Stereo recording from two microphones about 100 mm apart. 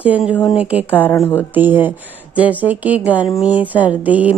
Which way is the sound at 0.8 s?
20° left (ahead or behind).